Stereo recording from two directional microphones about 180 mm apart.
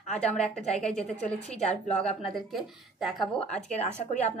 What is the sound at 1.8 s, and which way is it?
Speech, 5° left (ahead or behind).